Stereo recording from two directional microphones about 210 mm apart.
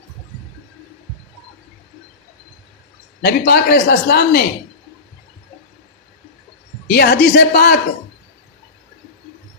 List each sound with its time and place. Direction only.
3.2 s a man's voice: 50° left (ahead or behind)
6.8 s a man's voice: 50° left (ahead or behind)